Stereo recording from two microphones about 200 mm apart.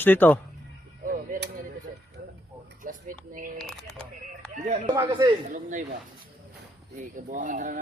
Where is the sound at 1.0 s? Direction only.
45° right (ahead or behind).